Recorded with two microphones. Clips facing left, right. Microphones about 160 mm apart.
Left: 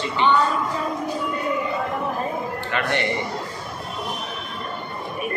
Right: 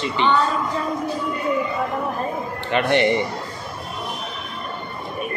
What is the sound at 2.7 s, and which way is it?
Speech, 20° right (ahead or behind).